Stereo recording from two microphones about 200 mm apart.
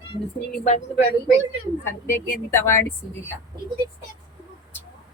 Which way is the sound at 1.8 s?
10° left (ahead or behind).